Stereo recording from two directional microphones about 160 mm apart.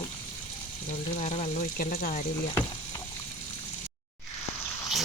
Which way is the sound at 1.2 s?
45° left (ahead or behind).